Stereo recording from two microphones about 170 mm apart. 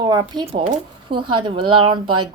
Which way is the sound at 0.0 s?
25° right (ahead or behind).